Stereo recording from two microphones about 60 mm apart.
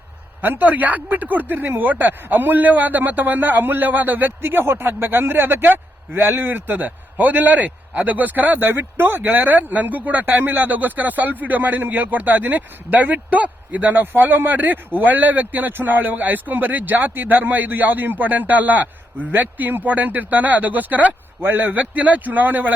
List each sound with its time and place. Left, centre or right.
0.4 s speech: right